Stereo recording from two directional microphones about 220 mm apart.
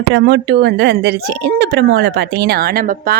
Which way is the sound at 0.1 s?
50° right (ahead or behind).